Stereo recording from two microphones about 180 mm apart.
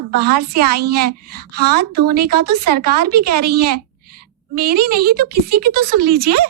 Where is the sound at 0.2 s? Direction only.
60° right (ahead or behind).